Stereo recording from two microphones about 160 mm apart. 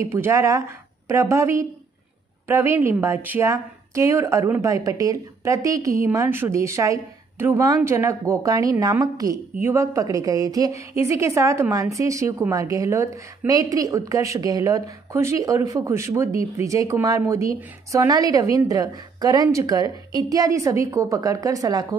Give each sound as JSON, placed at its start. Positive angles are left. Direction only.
{"t": 0.0, "sound": "a woman's voice", "side_deg": -15}